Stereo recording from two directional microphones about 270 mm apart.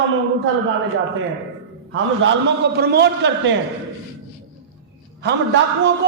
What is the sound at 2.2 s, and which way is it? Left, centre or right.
A man's voice, right.